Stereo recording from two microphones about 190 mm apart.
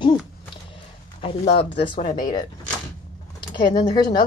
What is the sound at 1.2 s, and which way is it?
A woman's voice, 30° left (ahead or behind).